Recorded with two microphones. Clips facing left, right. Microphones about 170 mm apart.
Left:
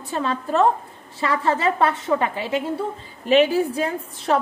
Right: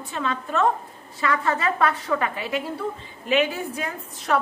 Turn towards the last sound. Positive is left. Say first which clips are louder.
# left 3 dB
turn(degrees=30)  # may be behind; listen again after turning